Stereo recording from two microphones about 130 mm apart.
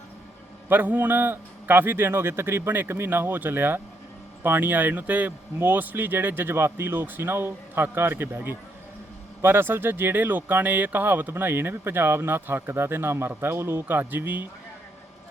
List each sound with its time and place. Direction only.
0.7 s speech: 15° right (ahead or behind)